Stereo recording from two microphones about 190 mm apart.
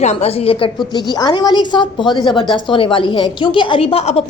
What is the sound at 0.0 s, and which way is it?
A woman's voice, 35° left (ahead or behind).